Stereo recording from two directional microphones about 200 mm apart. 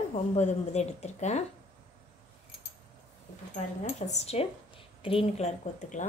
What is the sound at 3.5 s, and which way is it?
Speech, 35° left (ahead or behind).